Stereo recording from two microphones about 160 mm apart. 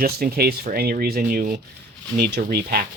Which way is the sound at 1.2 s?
60° right (ahead or behind).